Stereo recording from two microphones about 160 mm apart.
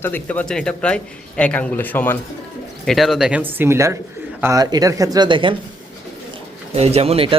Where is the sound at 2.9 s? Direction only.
Centre (ahead or behind); by 5.5 s 30° right (ahead or behind).